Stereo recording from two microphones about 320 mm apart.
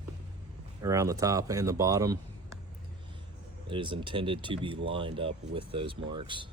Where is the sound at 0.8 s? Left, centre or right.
Centre.